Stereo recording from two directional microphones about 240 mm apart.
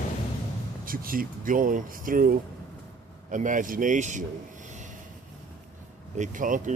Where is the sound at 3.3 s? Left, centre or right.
Right.